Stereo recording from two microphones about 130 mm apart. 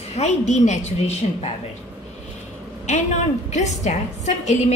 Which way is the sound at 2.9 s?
65° left (ahead or behind).